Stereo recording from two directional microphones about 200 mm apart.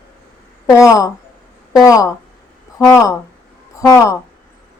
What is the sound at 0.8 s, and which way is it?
Speech, 15° left (ahead or behind).